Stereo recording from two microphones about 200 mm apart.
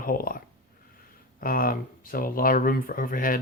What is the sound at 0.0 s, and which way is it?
Speech, 45° left (ahead or behind).